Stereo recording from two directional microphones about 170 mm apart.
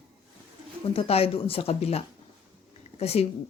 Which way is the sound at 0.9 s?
35° left (ahead or behind).